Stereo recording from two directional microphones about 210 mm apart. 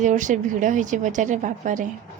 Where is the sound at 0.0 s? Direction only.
35° right (ahead or behind).